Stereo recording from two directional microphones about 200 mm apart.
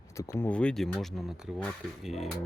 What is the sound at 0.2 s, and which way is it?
Speech, 15° left (ahead or behind).